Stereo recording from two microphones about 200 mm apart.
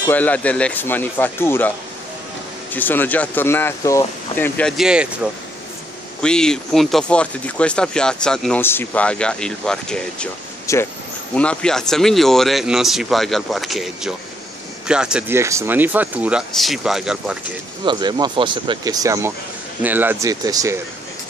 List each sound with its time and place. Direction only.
0.0 s speech: 10° left (ahead or behind)
2.7 s speech: 10° left (ahead or behind)
10.7 s speech: 15° left (ahead or behind)
11.3 s speech: 5° left (ahead or behind)
17.8 s speech: 20° right (ahead or behind)